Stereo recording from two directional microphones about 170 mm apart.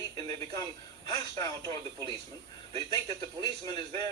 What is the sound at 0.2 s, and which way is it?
A man's voice, 20° left (ahead or behind).